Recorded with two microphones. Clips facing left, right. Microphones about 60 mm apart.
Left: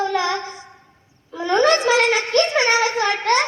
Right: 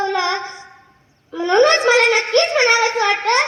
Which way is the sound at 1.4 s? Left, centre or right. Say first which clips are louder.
Right 3 dB; right.